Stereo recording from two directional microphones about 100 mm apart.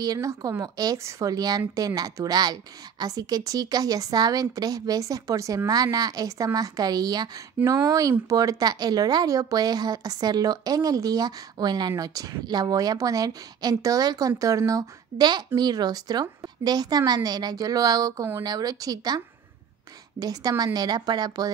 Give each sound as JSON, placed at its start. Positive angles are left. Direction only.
{"t": 0.0, "sound": "a woman's voice", "side_deg": -35}